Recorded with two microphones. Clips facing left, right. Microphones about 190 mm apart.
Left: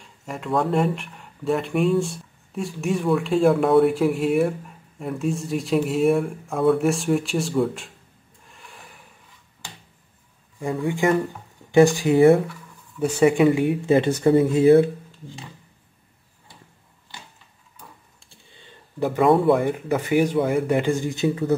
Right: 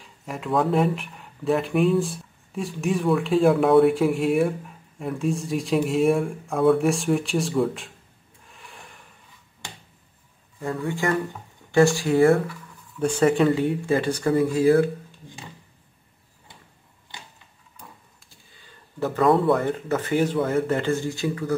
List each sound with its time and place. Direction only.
0.0 s speech: centre (ahead or behind)
8.5 s a sound: centre (ahead or behind)
10.6 s speech: 15° left (ahead or behind)
18.9 s speech: 15° left (ahead or behind)